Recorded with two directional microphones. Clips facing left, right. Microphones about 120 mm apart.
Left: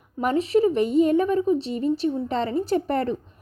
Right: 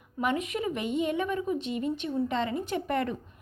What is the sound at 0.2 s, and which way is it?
A woman's voice, 35° left (ahead or behind).